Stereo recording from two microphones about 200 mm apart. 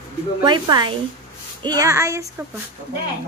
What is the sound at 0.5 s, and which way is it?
Speech, 20° right (ahead or behind).